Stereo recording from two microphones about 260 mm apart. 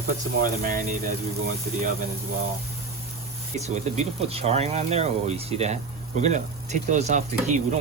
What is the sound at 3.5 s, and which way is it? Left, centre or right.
Speech, right.